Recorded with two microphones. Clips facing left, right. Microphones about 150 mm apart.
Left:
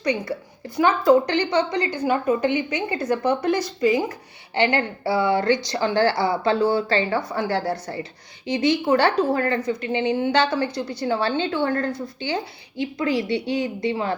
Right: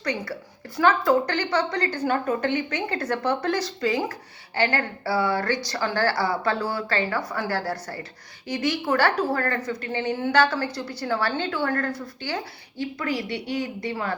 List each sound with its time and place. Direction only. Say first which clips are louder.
0.0 s a woman's voice: left 5 dB; 15° left (ahead or behind)